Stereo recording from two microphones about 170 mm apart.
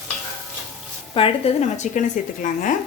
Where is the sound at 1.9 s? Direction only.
45° left (ahead or behind).